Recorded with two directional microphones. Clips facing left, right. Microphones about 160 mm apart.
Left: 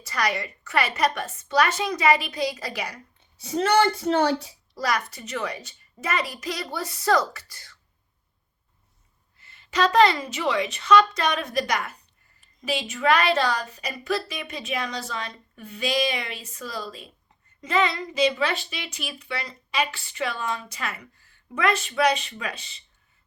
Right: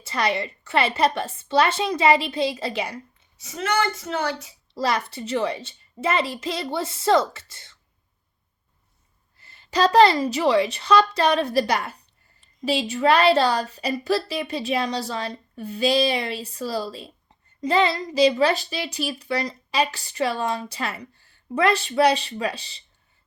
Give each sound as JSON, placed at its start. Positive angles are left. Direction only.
{"t": 0.0, "sound": "a child's voice", "side_deg": -25}
{"t": 3.3, "sound": "speech", "side_deg": 35}
{"t": 4.7, "sound": "a child's voice", "side_deg": -30}
{"t": 9.4, "sound": "a child's voice", "side_deg": -35}